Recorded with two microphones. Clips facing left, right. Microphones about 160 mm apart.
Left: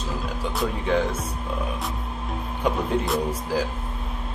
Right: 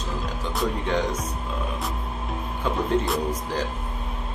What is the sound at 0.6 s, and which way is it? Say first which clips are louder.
Speech: left 1 dB; 5° left (ahead or behind).